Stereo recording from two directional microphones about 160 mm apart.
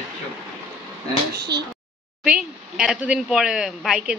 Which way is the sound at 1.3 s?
90° right.